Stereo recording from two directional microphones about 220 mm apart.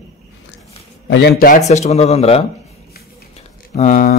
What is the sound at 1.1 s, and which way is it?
Speech, 45° left (ahead or behind).